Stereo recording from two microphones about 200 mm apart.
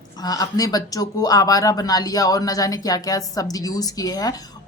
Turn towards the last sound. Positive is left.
turn(degrees=20)  # may be behind; listen again after turning